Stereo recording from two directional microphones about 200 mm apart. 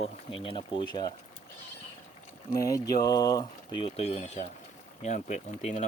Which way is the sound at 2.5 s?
15° left (ahead or behind).